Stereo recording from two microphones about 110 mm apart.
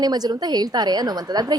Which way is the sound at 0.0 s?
35° right (ahead or behind).